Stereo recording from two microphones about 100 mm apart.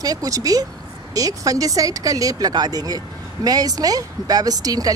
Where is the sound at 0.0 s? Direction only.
35° right (ahead or behind).